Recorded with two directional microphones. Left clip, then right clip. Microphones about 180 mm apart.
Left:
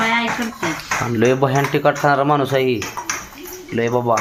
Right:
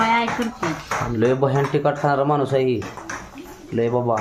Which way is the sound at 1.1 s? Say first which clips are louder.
Left 3 dB; 20° left (ahead or behind).